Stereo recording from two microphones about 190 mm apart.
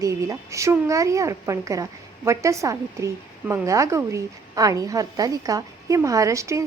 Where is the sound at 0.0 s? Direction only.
15° right (ahead or behind).